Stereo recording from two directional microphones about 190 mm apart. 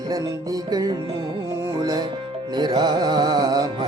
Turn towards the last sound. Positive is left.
turn(degrees=-20)  # may be behind; listen again after turning